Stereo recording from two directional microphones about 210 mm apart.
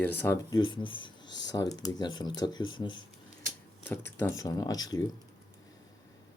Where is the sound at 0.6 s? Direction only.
25° left (ahead or behind).